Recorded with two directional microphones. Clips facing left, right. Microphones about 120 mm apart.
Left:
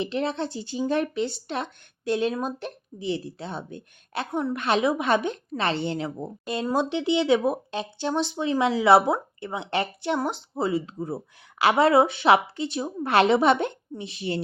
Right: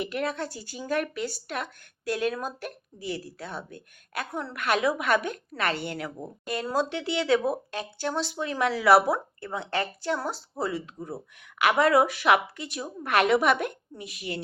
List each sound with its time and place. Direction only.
0.0 s speech: 25° left (ahead or behind)